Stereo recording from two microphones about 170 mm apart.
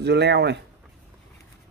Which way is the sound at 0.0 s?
80° right.